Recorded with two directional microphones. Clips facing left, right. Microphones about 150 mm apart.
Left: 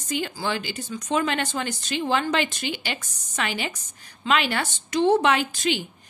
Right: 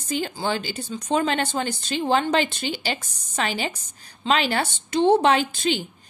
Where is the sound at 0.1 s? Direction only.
35° right (ahead or behind).